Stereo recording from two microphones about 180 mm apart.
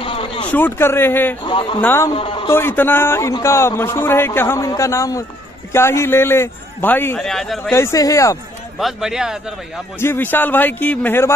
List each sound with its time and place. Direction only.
0.0 s a sound: 30° left (ahead or behind)
0.5 s a man's voice: 10° left (ahead or behind)
1.4 s speech: 25° left (ahead or behind)
1.8 s a man's voice: 15° left (ahead or behind)
2.1 s speech: 30° left (ahead or behind)
2.4 s a man's voice: 15° left (ahead or behind)
7.7 s a man's voice: 15° left (ahead or behind)
8.7 s speech: centre (ahead or behind)
9.9 s a man's voice: 10° left (ahead or behind)